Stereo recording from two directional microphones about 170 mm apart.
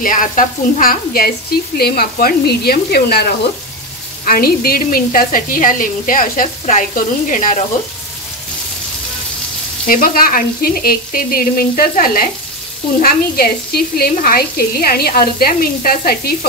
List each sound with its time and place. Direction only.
0.0 s speech: 50° left (ahead or behind)
9.8 s speech: 55° left (ahead or behind)